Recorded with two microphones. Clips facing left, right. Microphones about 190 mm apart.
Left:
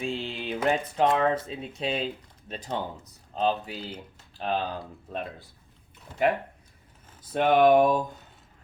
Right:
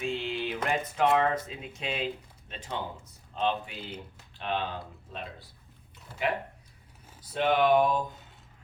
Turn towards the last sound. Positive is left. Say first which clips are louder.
# left 4 dB
turn(degrees=50)  # may be behind; listen again after turning